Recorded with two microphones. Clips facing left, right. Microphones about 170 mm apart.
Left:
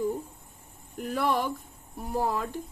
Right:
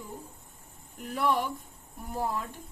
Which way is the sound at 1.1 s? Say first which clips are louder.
Left 1 dB; 90° left.